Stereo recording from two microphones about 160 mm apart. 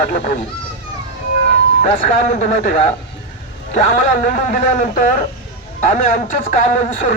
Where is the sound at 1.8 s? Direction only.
50° left (ahead or behind).